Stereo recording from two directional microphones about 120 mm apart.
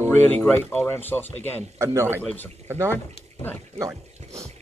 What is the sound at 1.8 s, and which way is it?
Speech, 20° right (ahead or behind).